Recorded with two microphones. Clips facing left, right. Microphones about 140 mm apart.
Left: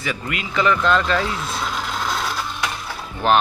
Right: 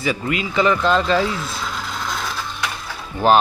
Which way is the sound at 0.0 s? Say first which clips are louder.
Right 5 dB; 30° right (ahead or behind).